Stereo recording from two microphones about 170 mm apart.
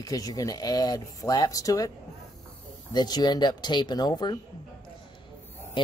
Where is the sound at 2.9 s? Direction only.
25° left (ahead or behind).